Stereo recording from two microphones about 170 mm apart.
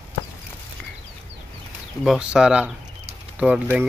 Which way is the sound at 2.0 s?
5° right (ahead or behind).